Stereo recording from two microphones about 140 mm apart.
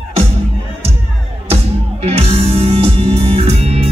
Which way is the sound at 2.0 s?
45° right (ahead or behind).